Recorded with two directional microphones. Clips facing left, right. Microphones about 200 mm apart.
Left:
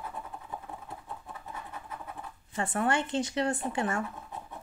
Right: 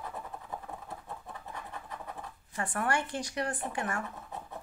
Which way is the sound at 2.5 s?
25° left (ahead or behind).